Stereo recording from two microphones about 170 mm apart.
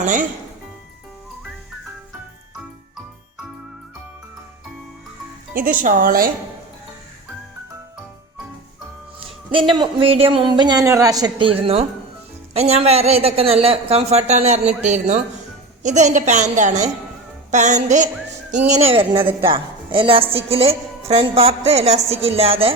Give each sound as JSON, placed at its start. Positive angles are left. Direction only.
{"t": 0.0, "sound": "a woman's voice", "side_deg": -50}
{"t": 5.8, "sound": "speech", "side_deg": -55}
{"t": 9.7, "sound": "a woman's voice", "side_deg": -30}